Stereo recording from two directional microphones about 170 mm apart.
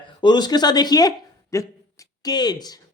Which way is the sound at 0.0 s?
25° left (ahead or behind).